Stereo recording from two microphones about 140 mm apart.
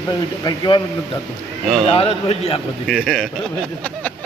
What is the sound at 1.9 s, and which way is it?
Speech, 45° left (ahead or behind).